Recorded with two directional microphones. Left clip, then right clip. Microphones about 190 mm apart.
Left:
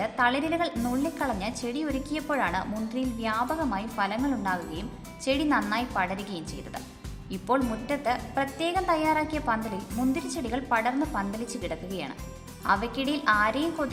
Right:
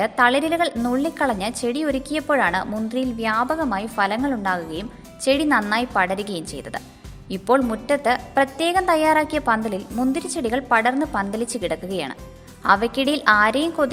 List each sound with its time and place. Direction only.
0.0 s a woman's voice: 40° right (ahead or behind)